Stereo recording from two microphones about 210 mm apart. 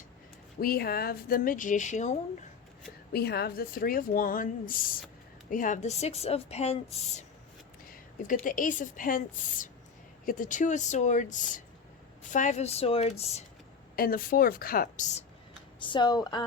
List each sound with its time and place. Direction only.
0.6 s speech: 45° left (ahead or behind)
3.1 s speech: 50° left (ahead or behind); by 7.3 s 30° left (ahead or behind)
8.4 s speech: 40° left (ahead or behind)
13.9 s speech: 45° left (ahead or behind)
15.8 s speech: 20° left (ahead or behind)